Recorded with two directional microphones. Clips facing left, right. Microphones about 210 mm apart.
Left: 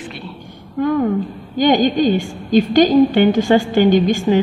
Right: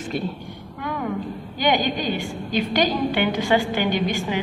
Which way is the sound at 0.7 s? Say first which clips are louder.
Left 11 dB; 40° left (ahead or behind).